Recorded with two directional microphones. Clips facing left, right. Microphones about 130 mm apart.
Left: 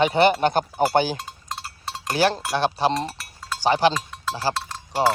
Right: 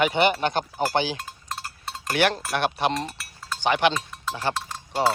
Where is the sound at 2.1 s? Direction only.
30° left (ahead or behind).